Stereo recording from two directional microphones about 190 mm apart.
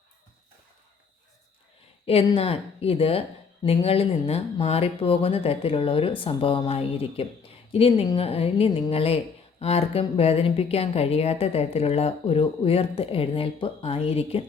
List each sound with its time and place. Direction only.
2.0 s a woman's voice: 30° left (ahead or behind)